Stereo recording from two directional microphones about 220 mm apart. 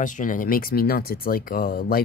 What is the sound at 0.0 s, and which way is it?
Speech, 35° left (ahead or behind).